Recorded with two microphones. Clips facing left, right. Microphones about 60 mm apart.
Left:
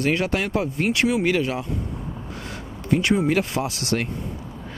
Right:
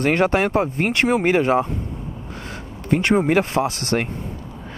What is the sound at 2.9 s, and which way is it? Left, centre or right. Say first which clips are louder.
Speech: right 3 dB; right.